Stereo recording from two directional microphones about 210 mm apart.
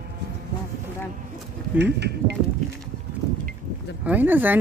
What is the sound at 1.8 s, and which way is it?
Speech, 55° right (ahead or behind).